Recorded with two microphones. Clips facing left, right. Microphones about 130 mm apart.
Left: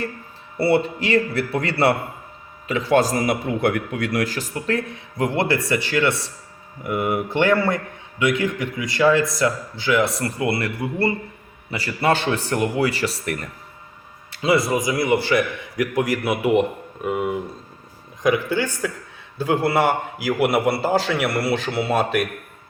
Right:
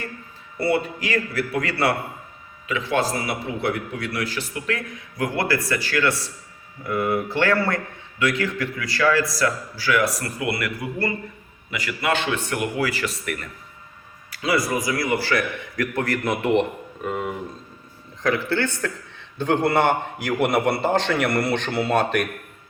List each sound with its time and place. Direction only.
0.5 s a man's voice: 30° left (ahead or behind); by 22.3 s 5° left (ahead or behind)